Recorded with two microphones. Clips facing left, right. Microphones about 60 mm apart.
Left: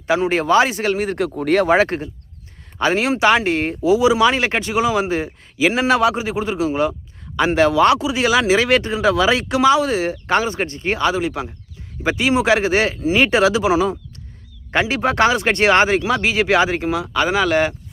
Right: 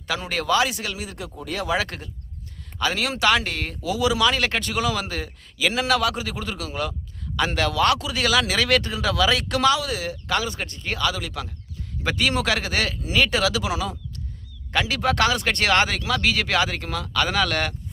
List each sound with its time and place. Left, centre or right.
0.1 s speech: left
9.8 s speech: left; by 17.7 s centre